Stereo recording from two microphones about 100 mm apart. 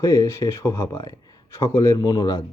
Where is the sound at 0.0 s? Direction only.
35° left (ahead or behind).